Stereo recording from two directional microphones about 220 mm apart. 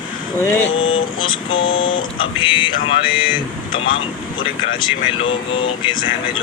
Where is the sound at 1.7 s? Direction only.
60° left (ahead or behind).